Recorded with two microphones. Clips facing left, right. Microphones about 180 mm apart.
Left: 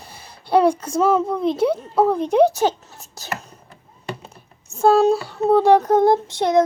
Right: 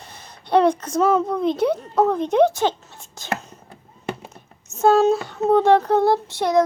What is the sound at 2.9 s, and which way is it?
Whispering, 40° left (ahead or behind).